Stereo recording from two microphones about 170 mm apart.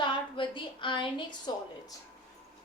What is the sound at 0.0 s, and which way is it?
A woman's voice, 30° left (ahead or behind).